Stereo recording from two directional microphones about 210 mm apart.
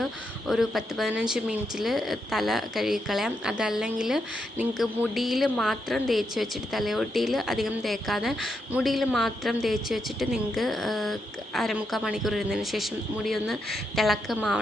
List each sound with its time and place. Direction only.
0.0 s speech: centre (ahead or behind)